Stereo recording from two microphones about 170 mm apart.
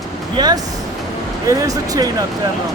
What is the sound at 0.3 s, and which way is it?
Vehicle, 25° right (ahead or behind).